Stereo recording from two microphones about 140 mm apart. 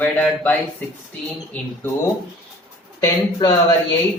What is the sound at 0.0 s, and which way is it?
Speech, 10° left (ahead or behind).